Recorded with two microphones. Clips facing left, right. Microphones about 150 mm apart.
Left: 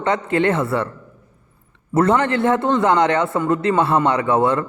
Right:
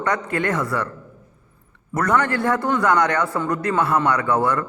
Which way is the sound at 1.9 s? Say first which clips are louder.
Left 4 dB; 25° left (ahead or behind).